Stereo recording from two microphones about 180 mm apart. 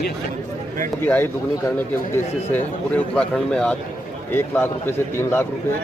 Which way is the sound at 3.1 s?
5° left (ahead or behind).